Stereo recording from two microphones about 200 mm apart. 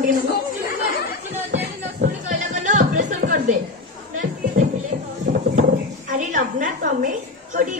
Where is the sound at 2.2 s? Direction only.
40° right (ahead or behind).